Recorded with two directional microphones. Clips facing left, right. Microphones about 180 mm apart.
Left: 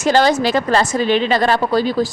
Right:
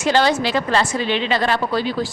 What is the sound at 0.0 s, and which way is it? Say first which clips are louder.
A woman's voice: left 3 dB; 45° left (ahead or behind).